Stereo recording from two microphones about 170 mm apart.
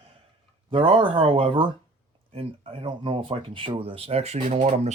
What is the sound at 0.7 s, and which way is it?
Speech, 30° right (ahead or behind).